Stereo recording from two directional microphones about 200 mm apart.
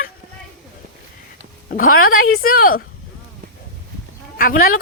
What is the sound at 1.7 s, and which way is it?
Speech, 45° left (ahead or behind).